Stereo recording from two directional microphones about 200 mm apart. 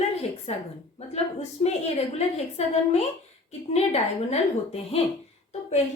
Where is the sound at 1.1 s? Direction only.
30° left (ahead or behind).